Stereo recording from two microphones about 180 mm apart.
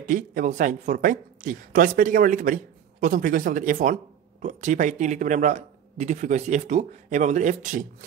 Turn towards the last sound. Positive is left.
turn(degrees=-45)  # may be behind; listen again after turning